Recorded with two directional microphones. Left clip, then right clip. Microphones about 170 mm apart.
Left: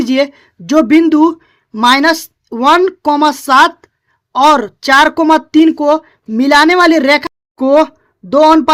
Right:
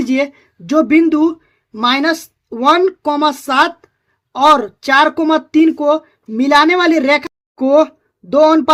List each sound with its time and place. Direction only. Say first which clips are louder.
0.0 s speech: left 4 dB; 40° left (ahead or behind)